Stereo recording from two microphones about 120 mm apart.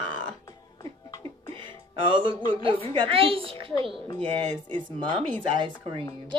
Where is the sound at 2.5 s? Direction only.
45° right (ahead or behind).